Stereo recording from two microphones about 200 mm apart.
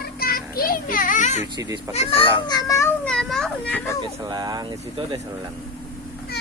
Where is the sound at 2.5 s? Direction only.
20° left (ahead or behind).